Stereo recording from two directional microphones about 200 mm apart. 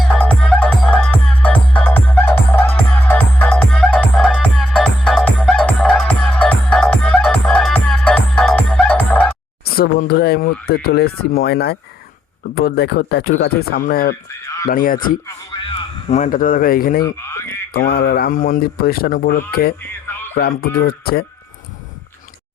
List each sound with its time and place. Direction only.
0.0 s music: centre (ahead or behind)
9.6 s speech: 50° left (ahead or behind)
17.0 s speech: 15° left (ahead or behind)
17.7 s speech: 50° left (ahead or behind)